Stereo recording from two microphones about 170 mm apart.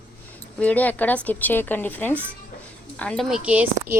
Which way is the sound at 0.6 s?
10° left (ahead or behind).